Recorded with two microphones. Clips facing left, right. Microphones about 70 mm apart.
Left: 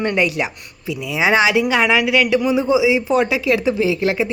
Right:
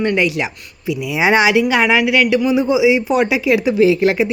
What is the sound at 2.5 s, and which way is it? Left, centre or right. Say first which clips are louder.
Speech: right 2 dB; centre.